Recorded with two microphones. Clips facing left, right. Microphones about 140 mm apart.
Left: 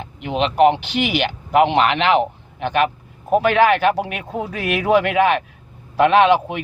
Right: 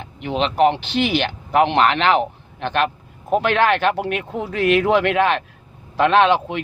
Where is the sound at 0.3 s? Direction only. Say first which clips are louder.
Left 2 dB; 10° left (ahead or behind).